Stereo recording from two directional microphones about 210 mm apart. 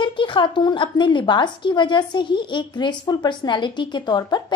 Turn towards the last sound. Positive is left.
turn(degrees=20)  # may be behind; listen again after turning